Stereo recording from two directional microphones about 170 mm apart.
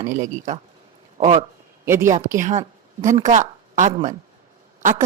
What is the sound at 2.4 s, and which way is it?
A woman's voice, 45° right (ahead or behind).